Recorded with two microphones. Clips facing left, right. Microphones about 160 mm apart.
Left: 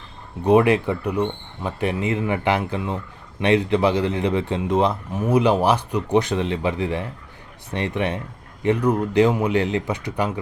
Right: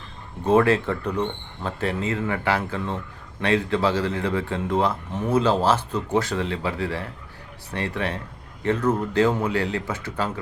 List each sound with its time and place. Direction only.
0.4 s speech: 15° left (ahead or behind)